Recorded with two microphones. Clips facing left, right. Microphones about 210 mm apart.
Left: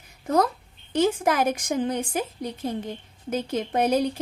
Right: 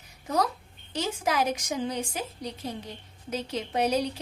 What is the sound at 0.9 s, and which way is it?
A woman's voice, 50° left (ahead or behind).